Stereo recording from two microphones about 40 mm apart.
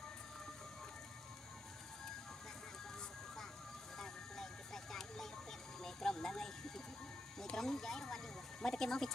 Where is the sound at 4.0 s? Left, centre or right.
Centre.